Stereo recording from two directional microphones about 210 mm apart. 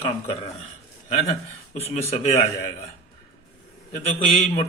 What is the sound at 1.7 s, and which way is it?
Speech, 30° left (ahead or behind).